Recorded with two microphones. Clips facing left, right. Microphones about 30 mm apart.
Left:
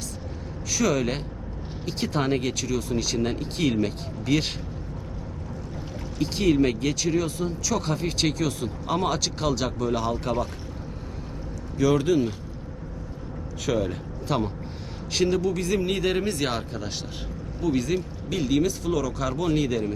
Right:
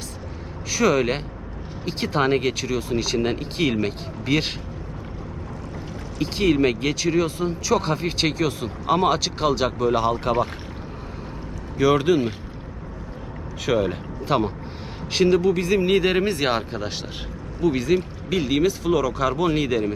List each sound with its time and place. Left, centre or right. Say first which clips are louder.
0.7 s speech: right 4 dB; right
6.1 s speech: right 2 dB; centre
11.8 s speech: right 3 dB; right
13.7 s speech: right 4 dB; right